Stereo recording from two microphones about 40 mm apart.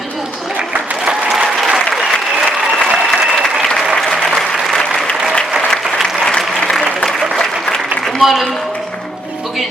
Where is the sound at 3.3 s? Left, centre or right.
Centre.